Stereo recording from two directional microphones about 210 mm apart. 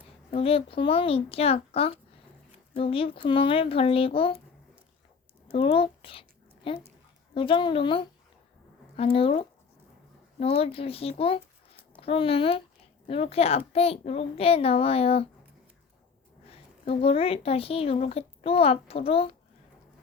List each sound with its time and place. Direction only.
0.3 s a child's voice: 25° left (ahead or behind)
5.5 s a child's voice: 25° left (ahead or behind)
16.5 s a woman's voice: 25° left (ahead or behind)